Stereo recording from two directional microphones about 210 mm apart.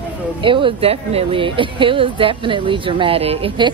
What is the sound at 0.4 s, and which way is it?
Speech, 25° right (ahead or behind).